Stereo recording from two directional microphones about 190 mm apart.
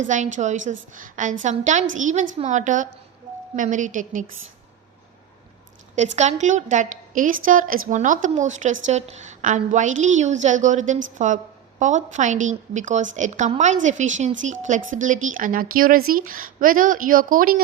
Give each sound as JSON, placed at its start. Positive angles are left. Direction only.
{"t": 0.1, "sound": "a woman's voice", "side_deg": -40}
{"t": 6.0, "sound": "a woman's voice", "side_deg": -35}